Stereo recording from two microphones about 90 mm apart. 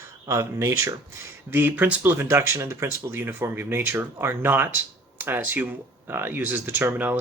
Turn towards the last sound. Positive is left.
turn(degrees=-20)  # may be behind; listen again after turning